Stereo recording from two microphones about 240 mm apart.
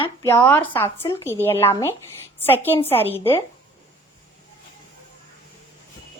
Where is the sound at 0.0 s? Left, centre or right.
Centre.